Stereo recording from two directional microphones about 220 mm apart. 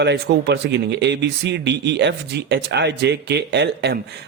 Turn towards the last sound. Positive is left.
turn(degrees=-50)  # may be behind; listen again after turning